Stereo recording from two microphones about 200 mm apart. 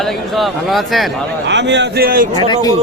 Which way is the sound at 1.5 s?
60° right (ahead or behind).